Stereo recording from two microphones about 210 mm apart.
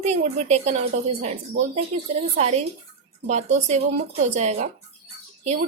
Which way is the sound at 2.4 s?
30° right (ahead or behind).